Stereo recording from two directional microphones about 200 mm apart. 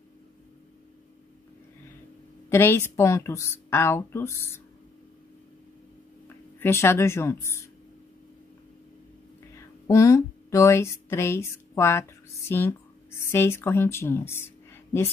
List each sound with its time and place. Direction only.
2.5 s speech: 10° left (ahead or behind)
6.2 s speech: 10° left (ahead or behind)
9.8 s speech: 15° left (ahead or behind)